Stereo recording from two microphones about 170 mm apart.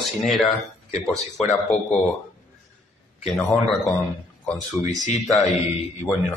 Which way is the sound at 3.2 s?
5° left (ahead or behind).